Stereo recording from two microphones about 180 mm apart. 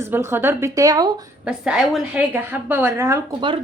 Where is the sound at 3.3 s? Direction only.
25° right (ahead or behind).